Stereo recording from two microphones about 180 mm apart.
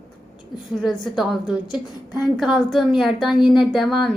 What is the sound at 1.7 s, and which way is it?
A woman's voice, 5° right (ahead or behind).